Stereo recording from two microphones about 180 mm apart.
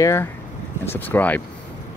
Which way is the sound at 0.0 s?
15° left (ahead or behind).